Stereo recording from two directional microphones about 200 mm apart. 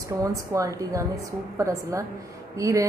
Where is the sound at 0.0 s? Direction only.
15° right (ahead or behind).